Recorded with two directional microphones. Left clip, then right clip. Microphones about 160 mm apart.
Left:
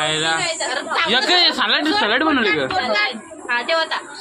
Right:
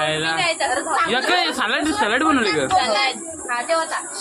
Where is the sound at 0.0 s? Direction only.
Centre (ahead or behind).